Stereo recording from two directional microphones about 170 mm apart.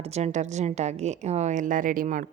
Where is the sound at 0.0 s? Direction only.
40° right (ahead or behind).